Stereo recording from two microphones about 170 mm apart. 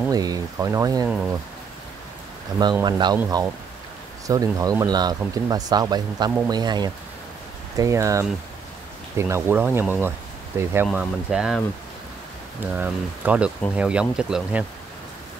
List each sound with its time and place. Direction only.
0.1 s speech: 20° right (ahead or behind)
1.0 s speech: 5° right (ahead or behind)
2.6 s speech: 25° right (ahead or behind)
4.3 s speech: 20° right (ahead or behind); by 11.6 s 5° right (ahead or behind)
12.7 s speech: 10° right (ahead or behind)